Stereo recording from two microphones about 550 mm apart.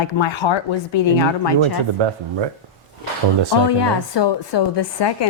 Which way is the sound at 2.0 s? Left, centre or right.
Right.